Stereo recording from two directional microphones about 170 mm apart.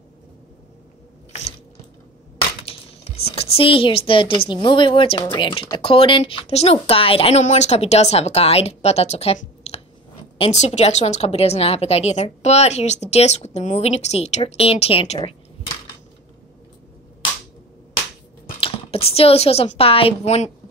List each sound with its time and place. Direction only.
2.6 s a woman's voice: 35° left (ahead or behind)
18.6 s a woman's voice: 35° left (ahead or behind)